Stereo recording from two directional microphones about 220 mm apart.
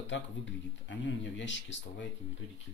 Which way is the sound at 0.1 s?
55° left (ahead or behind).